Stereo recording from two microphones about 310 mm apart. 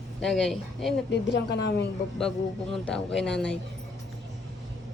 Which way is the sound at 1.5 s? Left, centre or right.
Left.